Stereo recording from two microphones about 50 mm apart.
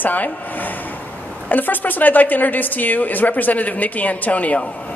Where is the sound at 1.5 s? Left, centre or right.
Left.